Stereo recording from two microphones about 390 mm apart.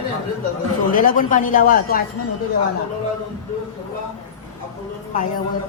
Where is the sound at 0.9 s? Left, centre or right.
Left.